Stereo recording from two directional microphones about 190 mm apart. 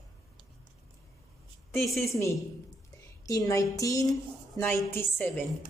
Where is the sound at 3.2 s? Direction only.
15° left (ahead or behind).